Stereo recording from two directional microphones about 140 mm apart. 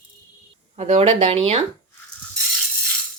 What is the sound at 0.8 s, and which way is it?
Speech, 50° right (ahead or behind).